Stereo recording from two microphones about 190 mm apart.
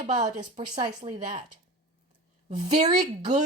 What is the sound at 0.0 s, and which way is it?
Speech, 40° right (ahead or behind).